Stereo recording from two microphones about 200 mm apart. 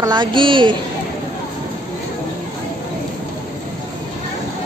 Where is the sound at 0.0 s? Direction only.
20° right (ahead or behind).